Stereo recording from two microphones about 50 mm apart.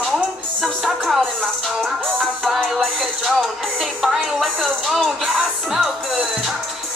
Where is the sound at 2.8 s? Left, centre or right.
Centre.